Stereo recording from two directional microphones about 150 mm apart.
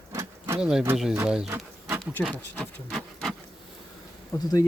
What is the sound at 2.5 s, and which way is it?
Rub, 5° left (ahead or behind).